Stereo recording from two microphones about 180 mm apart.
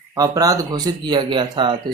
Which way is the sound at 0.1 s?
20° right (ahead or behind).